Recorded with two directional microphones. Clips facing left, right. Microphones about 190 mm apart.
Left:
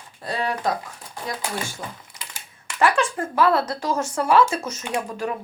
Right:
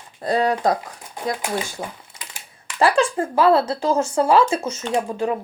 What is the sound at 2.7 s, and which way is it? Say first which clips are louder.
Speech: right 3 dB; 30° right (ahead or behind).